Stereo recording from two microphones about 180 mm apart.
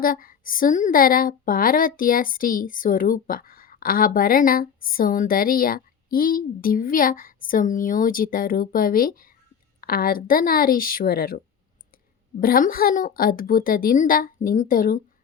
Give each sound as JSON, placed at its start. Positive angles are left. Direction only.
{"t": 0.0, "sound": "a woman's voice", "side_deg": 55}
{"t": 12.4, "sound": "a woman's voice", "side_deg": 55}